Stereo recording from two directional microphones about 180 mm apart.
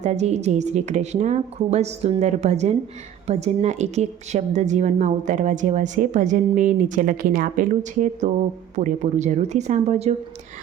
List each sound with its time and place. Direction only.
0.0 s a woman's voice: 40° right (ahead or behind)